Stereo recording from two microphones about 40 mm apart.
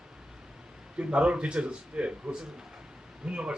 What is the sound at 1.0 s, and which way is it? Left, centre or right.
Speech, right.